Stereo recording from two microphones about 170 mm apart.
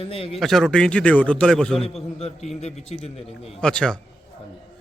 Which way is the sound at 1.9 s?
40° left (ahead or behind).